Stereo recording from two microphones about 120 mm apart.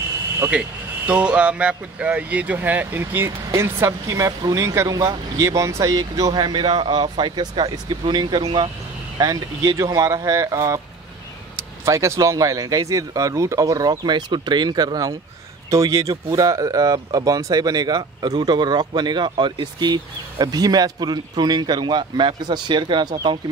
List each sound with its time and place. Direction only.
0.5 s speech: 10° right (ahead or behind); by 23.4 s 35° right (ahead or behind)